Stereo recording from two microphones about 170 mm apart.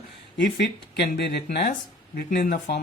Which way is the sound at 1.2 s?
75° left (ahead or behind).